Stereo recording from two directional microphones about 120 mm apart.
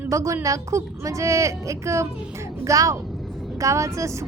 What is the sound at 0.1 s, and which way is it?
A woman's voice, 25° right (ahead or behind).